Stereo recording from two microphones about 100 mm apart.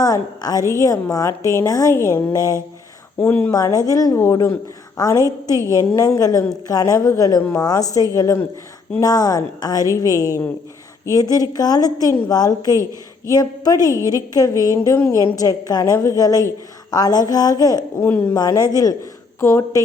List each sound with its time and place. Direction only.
0.0 s a woman's voice: 40° left (ahead or behind)
3.2 s speech: 20° left (ahead or behind)
3.5 s a woman's voice: 40° left (ahead or behind)
5.2 s a woman's voice: 30° right (ahead or behind)
5.6 s a woman's voice: 30° left (ahead or behind)
12.7 s a woman's voice: 30° right (ahead or behind)
13.3 s a woman's voice: 40° left (ahead or behind)
18.0 s speech: 25° left (ahead or behind)
18.3 s a woman's voice: 40° left (ahead or behind)